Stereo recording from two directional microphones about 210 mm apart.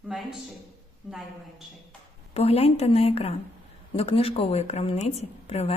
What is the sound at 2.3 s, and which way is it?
A woman's voice, 30° left (ahead or behind).